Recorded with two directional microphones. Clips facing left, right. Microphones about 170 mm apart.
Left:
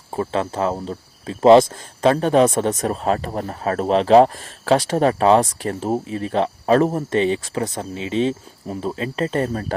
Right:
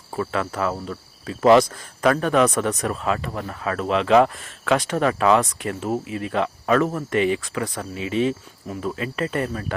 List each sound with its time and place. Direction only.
0.2 s speech: 30° left (ahead or behind)